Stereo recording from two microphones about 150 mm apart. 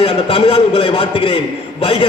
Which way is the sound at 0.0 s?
40° left (ahead or behind).